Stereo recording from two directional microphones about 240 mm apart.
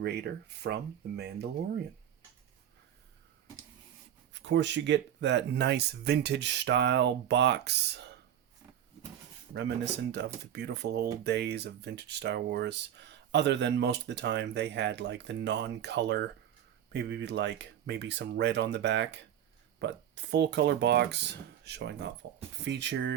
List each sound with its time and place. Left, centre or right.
0.0 s speech: right
4.3 s speech: right
10.1 s speech: right